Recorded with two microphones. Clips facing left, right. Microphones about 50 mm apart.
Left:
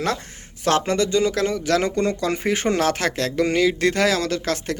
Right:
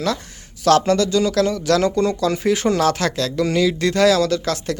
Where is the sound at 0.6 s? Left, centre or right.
Left.